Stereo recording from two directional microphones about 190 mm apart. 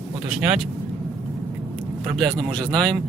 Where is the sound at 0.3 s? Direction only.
Centre (ahead or behind).